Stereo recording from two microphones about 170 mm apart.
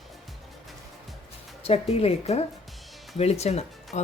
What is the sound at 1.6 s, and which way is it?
Speech, 35° left (ahead or behind).